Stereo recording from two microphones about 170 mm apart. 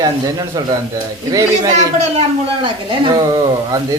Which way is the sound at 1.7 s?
40° right (ahead or behind).